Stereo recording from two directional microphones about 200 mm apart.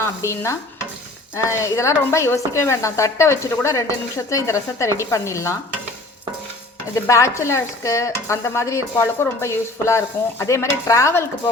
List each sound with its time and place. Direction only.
0.0 s speech: 15° left (ahead or behind)
6.9 s speech: 15° left (ahead or behind)